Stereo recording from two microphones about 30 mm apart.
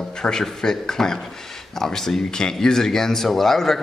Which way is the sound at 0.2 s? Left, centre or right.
Left.